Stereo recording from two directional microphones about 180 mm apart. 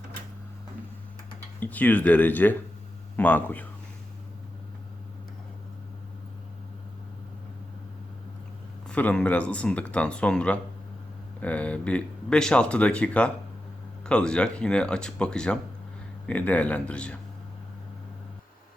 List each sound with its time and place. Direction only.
1.5 s speech: 10° left (ahead or behind)
8.9 s speech: 5° left (ahead or behind)